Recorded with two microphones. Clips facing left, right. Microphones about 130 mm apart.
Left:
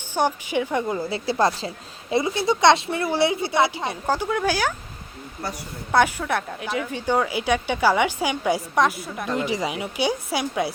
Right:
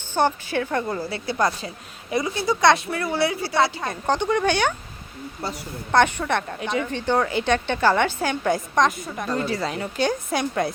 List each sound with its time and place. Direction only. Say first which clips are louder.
0.1 s speech: right 1 dB; 10° left (ahead or behind)
1.3 s a woman's voice: left 2 dB; 30° left (ahead or behind); by 4.7 s 5° left (ahead or behind)
5.9 s speech: right 1 dB; 5° left (ahead or behind)